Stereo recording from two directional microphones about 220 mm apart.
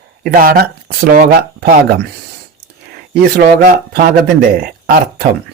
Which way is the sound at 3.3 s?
45° right (ahead or behind).